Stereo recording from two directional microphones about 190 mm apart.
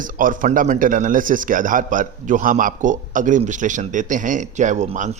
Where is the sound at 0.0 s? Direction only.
45° right (ahead or behind).